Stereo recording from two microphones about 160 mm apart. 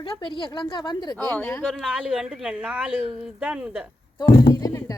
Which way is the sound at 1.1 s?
15° left (ahead or behind).